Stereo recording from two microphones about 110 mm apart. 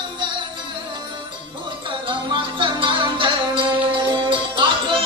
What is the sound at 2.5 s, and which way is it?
Music, 50° right (ahead or behind).